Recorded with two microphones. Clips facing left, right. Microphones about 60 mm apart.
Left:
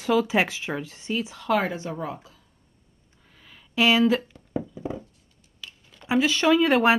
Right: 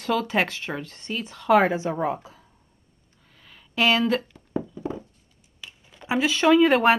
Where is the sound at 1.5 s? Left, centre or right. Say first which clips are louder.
Right 6 dB; centre.